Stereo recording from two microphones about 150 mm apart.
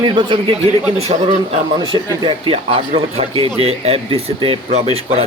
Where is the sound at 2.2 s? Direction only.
35° right (ahead or behind).